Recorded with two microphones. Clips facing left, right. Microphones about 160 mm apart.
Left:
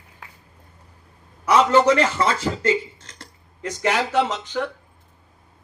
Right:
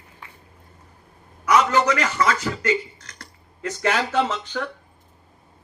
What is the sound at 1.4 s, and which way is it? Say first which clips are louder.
A man's voice: left 3 dB; 30° left (ahead or behind).